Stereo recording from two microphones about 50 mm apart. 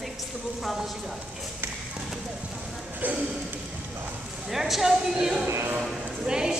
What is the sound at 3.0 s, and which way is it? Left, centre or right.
Speech, right.